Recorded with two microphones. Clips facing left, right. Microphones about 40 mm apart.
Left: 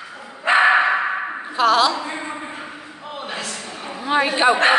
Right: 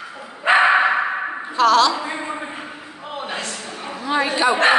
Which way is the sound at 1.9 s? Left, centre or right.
Centre.